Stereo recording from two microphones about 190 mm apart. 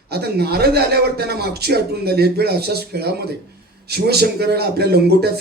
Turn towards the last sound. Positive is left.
turn(degrees=-60)  # may be behind; listen again after turning